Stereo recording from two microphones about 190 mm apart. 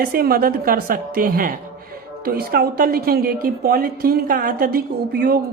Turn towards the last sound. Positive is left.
turn(degrees=-50)  # may be behind; listen again after turning